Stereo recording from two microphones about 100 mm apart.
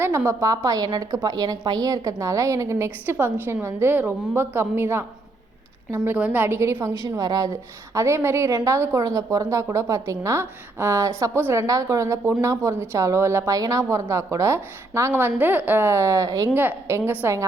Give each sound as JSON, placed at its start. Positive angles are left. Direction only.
{"t": 0.3, "sound": "a woman's voice", "side_deg": -35}
{"t": 6.1, "sound": "a woman's voice", "side_deg": -15}
{"t": 11.3, "sound": "a woman's voice", "side_deg": -20}
{"t": 11.6, "sound": "a woman's voice", "side_deg": -35}
{"t": 16.6, "sound": "a woman's voice", "side_deg": -25}